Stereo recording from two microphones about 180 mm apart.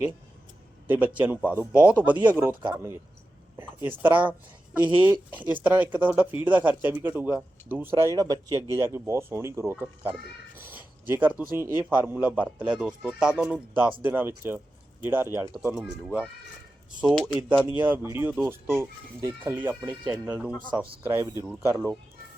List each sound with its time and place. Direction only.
0.9 s a man's voice: 10° right (ahead or behind)
17.7 s speech: 10° right (ahead or behind)